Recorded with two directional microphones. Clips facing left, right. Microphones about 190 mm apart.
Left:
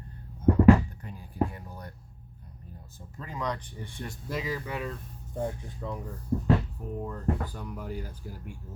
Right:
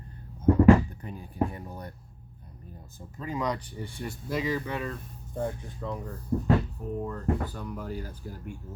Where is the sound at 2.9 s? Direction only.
10° right (ahead or behind).